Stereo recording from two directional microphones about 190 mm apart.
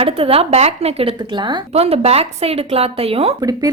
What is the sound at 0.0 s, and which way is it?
Speech, 30° right (ahead or behind).